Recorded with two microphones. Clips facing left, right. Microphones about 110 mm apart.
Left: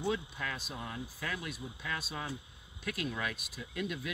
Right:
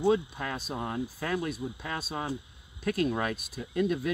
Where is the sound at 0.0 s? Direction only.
35° right (ahead or behind).